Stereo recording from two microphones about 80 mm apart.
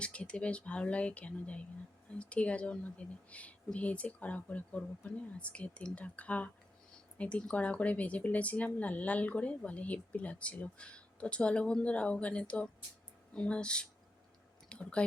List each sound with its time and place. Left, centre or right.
0.0 s speech: centre